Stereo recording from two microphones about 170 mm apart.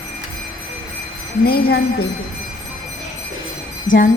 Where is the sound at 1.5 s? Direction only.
65° left (ahead or behind).